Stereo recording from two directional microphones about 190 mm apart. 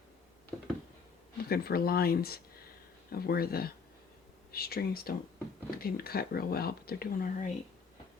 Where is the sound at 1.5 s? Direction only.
55° left (ahead or behind).